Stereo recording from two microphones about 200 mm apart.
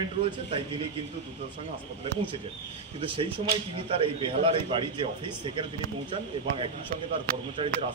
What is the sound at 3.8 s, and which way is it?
A man's voice, 25° right (ahead or behind).